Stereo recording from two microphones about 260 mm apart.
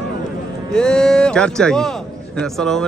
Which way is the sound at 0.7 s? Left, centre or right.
Centre.